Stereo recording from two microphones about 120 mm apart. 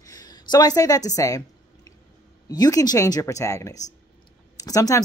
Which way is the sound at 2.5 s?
35° left (ahead or behind).